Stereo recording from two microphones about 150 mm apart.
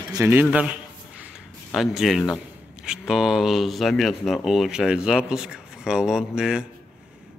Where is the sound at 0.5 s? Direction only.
10° right (ahead or behind).